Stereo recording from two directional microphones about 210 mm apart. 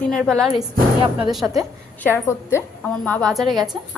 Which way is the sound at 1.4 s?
15° right (ahead or behind).